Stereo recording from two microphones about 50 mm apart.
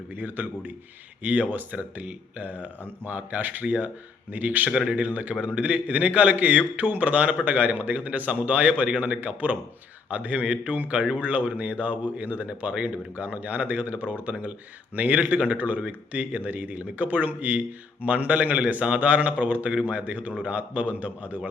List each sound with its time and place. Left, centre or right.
0.1 s speech: right
4.7 s speech: centre
4.9 s a man's voice: right